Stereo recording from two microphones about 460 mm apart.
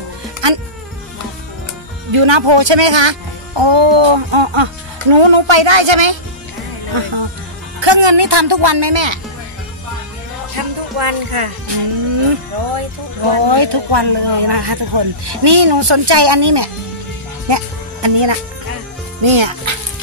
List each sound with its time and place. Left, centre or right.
0.4 s insect: right
2.1 s speech: right
11.0 s speech: right
12.2 s speech: right
13.3 s speech: right
17.5 s music: right
19.2 s a child's voice: right